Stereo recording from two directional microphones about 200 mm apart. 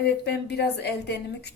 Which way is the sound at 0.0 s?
55° left (ahead or behind).